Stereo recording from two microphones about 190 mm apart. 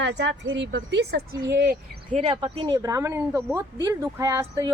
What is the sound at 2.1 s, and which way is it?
Speech, 35° right (ahead or behind).